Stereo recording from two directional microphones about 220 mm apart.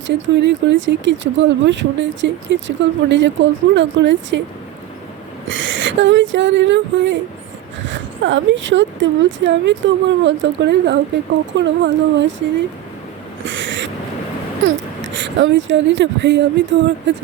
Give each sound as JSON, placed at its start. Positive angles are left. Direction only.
{"t": 0.1, "sound": "speech", "side_deg": -55}
{"t": 5.5, "sound": "speech", "side_deg": -60}
{"t": 13.4, "sound": "owl", "side_deg": -55}
{"t": 15.0, "sound": "speech", "side_deg": -55}